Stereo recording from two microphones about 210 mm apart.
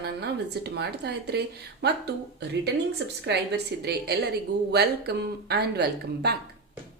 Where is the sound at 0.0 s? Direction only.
55° right (ahead or behind).